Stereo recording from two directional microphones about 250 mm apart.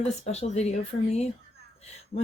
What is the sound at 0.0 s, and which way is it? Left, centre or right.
Speech, left.